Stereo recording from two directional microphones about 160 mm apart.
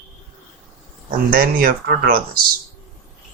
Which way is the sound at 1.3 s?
65° right (ahead or behind).